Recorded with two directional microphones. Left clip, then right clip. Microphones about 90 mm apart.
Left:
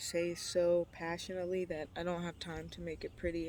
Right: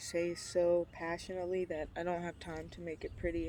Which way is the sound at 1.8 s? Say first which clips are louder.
Right 2 dB; 55° left (ahead or behind).